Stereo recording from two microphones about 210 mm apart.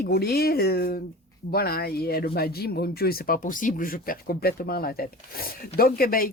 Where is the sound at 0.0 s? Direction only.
45° left (ahead or behind).